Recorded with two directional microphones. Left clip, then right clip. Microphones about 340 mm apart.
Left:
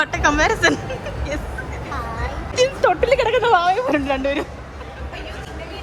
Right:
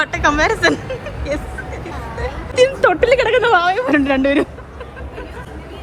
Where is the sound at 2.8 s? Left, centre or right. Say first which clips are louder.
Right 3 dB; right.